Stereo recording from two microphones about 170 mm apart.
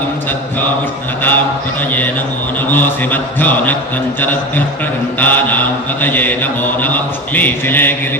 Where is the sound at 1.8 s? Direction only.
10° left (ahead or behind).